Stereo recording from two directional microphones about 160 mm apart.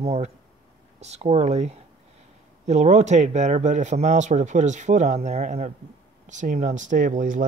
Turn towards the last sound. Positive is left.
turn(degrees=-55)  # may be behind; listen again after turning